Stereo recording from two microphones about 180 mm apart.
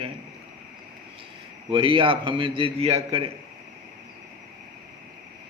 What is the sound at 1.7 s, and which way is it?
A man's voice, 30° right (ahead or behind).